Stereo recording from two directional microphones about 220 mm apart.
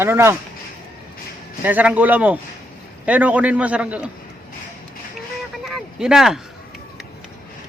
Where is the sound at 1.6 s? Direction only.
5° right (ahead or behind).